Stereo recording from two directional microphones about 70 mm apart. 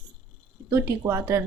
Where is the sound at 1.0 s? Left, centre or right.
Right.